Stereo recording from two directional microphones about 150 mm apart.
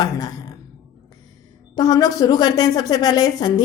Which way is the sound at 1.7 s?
25° left (ahead or behind).